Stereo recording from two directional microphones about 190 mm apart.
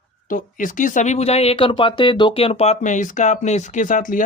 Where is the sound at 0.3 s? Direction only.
45° left (ahead or behind).